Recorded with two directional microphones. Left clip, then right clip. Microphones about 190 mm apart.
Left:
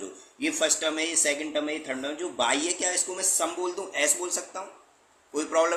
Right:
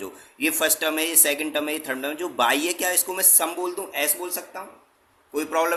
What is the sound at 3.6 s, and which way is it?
A man's voice, 20° right (ahead or behind).